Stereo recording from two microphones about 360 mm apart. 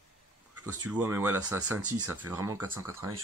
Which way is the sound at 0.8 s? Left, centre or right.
Centre.